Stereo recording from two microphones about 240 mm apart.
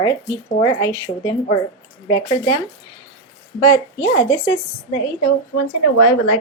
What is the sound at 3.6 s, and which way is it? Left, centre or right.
Speech, centre.